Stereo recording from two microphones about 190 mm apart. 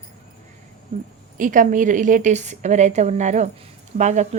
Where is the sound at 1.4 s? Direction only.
45° right (ahead or behind).